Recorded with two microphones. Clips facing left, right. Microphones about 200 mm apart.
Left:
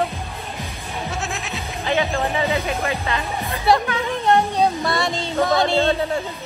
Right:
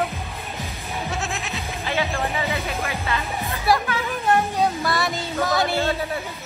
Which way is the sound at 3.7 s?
30° left (ahead or behind).